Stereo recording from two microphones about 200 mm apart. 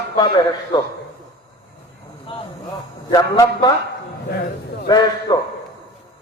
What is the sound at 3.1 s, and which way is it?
Speech, 20° left (ahead or behind).